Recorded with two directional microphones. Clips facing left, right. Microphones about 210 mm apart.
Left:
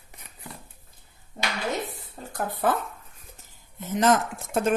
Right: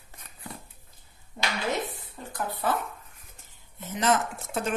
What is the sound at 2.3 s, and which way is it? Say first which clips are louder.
Speech: left 3 dB; 50° left (ahead or behind).